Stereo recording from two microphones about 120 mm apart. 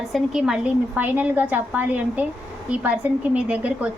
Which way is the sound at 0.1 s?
5° right (ahead or behind).